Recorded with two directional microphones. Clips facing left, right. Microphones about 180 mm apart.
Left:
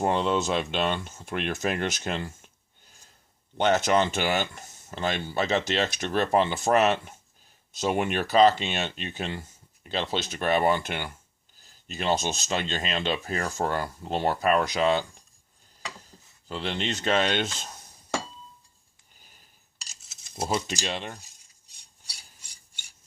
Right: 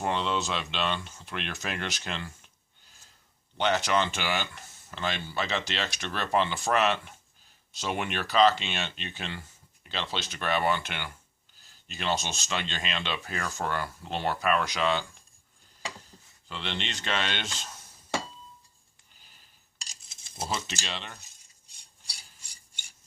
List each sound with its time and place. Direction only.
0.0 s speech: 45° left (ahead or behind)
3.6 s speech: 45° left (ahead or behind)
16.5 s speech: 40° left (ahead or behind)
19.8 s cutlery: 5° left (ahead or behind)
20.7 s speech: 45° left (ahead or behind)